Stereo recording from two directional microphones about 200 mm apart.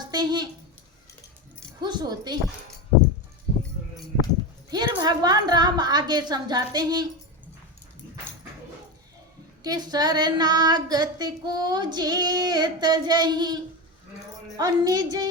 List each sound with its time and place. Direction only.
0.0 s a sound: 20° right (ahead or behind)
1.8 s child singing: 20° right (ahead or behind)
4.7 s child singing: 20° right (ahead or behind)
9.6 s child singing: 20° right (ahead or behind)